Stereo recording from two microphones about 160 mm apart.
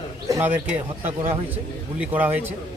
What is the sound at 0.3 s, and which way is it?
Bird, 15° right (ahead or behind).